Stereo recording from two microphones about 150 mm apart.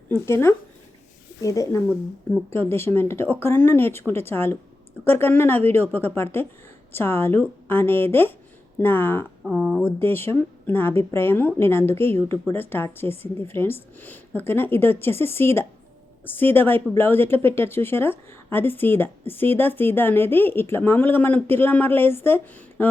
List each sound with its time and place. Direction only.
0.1 s speech: 15° left (ahead or behind)
9.4 s speech: 5° right (ahead or behind)
9.8 s a woman's voice: 15° left (ahead or behind)